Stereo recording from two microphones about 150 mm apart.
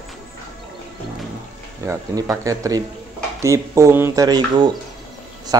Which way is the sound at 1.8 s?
20° right (ahead or behind).